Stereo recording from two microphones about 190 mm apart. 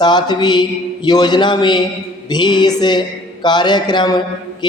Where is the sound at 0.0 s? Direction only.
20° left (ahead or behind).